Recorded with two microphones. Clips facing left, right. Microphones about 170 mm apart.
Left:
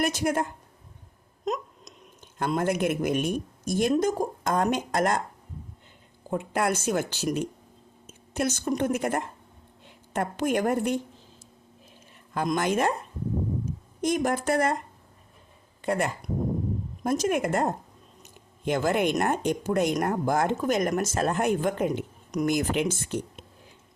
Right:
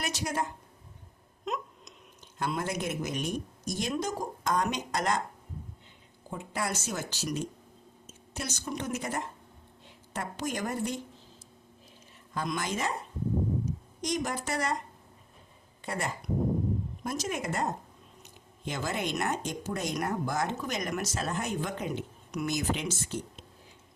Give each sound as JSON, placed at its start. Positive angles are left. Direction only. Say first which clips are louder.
{"t": 0.0, "sound": "speech", "louder": "left 7 dB", "side_deg": 50}
{"t": 1.5, "sound": "hiccup", "louder": "left 5 dB", "side_deg": 40}
{"t": 2.4, "sound": "speech", "louder": "left 7 dB", "side_deg": 55}
{"t": 6.3, "sound": "speech", "louder": "left 8 dB", "side_deg": 60}
{"t": 12.3, "sound": "a woman's voice", "louder": "left 7 dB", "side_deg": 55}
{"t": 15.8, "sound": "speech", "louder": "left 8 dB", "side_deg": 60}
{"t": 18.2, "sound": "a sound", "louder": "left 2 dB", "side_deg": 55}
{"t": 19.1, "sound": "speech", "louder": "left 7 dB", "side_deg": 55}